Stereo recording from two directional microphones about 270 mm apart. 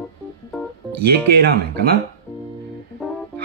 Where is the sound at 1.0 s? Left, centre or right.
Right.